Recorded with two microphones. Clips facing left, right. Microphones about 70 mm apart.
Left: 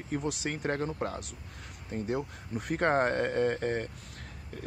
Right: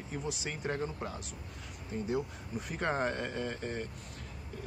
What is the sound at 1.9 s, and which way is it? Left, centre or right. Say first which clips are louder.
Speech: left 1 dB; left.